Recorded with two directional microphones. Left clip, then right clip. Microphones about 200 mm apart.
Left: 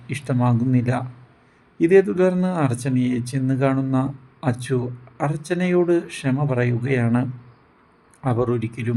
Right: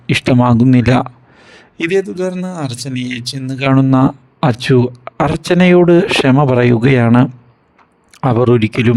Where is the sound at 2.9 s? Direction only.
50° right (ahead or behind).